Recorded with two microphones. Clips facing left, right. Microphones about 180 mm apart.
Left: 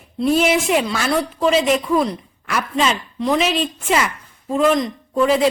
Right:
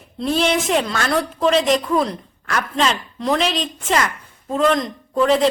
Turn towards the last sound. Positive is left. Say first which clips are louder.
# even
turn(degrees=5)  # may be behind; listen again after turning